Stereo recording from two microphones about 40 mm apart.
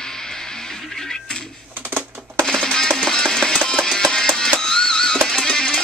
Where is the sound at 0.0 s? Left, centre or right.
Centre.